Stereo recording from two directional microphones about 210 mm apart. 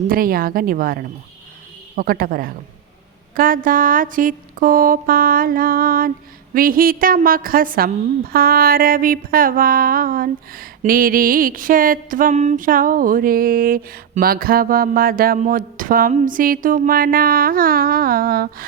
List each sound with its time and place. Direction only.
0.1 s a woman's voice: 45° right (ahead or behind)
3.3 s a sound: 40° right (ahead or behind)
6.5 s a woman's voice: 40° right (ahead or behind)